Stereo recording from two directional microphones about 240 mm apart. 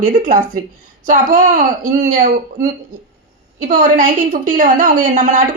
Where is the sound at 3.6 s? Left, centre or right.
Right.